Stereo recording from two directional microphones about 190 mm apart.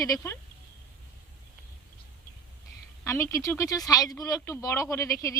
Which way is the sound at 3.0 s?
15° left (ahead or behind).